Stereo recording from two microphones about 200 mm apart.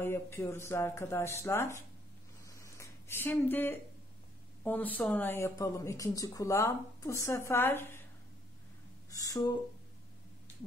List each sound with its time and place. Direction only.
0.0 s speech: 15° left (ahead or behind)
2.4 s a sound: 15° left (ahead or behind)
4.6 s speech: 10° left (ahead or behind)
9.1 s speech: 15° left (ahead or behind)